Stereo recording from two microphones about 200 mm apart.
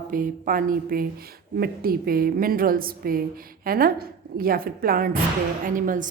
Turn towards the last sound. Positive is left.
turn(degrees=-40)  # may be behind; listen again after turning